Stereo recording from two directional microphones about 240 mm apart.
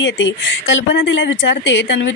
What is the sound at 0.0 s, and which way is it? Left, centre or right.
A woman's voice, left.